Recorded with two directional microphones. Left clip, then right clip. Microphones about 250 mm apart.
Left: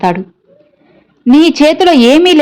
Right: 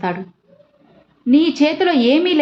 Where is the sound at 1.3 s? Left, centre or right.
Left.